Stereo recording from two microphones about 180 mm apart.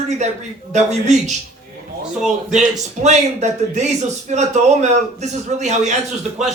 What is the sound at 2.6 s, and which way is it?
A man's voice, 40° right (ahead or behind).